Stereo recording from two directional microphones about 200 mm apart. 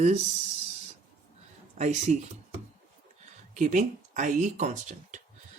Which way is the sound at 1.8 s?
35° right (ahead or behind).